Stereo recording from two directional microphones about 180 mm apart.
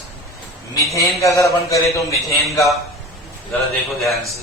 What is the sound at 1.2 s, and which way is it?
A man's voice, 15° left (ahead or behind).